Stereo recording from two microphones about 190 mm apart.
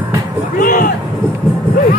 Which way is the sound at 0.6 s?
45° left (ahead or behind).